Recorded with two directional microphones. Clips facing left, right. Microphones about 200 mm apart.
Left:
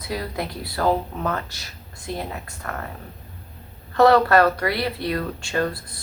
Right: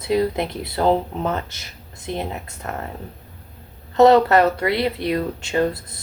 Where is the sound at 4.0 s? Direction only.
20° right (ahead or behind).